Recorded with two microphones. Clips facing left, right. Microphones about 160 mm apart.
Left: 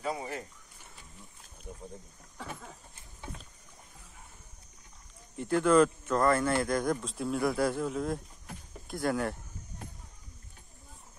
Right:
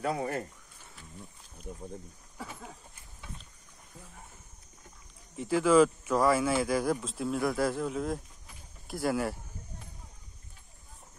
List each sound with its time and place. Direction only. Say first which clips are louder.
0.0 s speech: right 4 dB; 60° right (ahead or behind)
2.4 s speech: left 1 dB; 5° right (ahead or behind)
5.3 s speech: right 1 dB; centre (ahead or behind)